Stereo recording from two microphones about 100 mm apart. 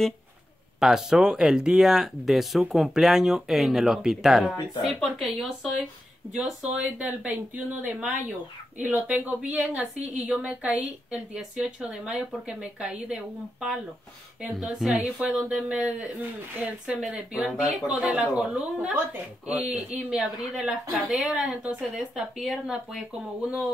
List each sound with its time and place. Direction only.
0.7 s speech: 5° right (ahead or behind)
15.0 s speech: 15° right (ahead or behind); by 23.0 s centre (ahead or behind)